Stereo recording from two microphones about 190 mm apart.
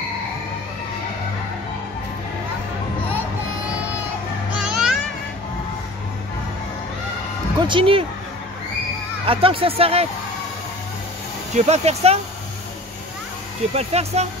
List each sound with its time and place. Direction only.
4.6 s music: 5° right (ahead or behind)
7.6 s speech: 25° right (ahead or behind)
9.2 s speech: 30° right (ahead or behind)
11.5 s speech: 35° right (ahead or behind)
13.7 s speech: 35° right (ahead or behind)